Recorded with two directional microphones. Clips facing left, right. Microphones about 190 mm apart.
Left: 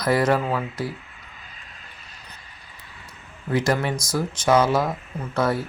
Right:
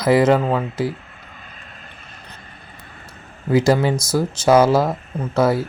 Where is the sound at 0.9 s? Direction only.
50° right (ahead or behind).